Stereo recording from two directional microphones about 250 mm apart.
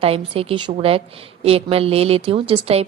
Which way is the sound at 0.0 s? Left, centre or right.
Right.